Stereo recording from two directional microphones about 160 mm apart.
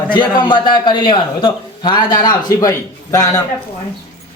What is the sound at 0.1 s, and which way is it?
A man's voice, 30° left (ahead or behind).